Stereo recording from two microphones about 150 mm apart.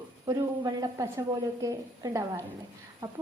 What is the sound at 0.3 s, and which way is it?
A woman's voice, 25° right (ahead or behind).